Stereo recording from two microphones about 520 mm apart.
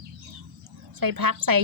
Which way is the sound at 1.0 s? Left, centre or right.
Right.